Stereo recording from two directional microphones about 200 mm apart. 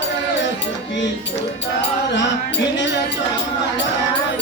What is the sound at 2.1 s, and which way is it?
Music, 65° left (ahead or behind).